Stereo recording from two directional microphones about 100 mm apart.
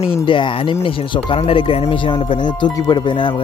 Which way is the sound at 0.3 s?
55° left (ahead or behind).